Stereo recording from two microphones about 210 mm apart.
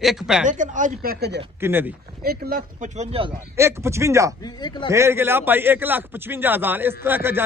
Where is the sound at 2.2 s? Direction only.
45° right (ahead or behind).